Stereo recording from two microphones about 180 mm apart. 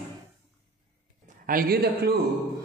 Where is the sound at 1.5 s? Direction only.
55° right (ahead or behind).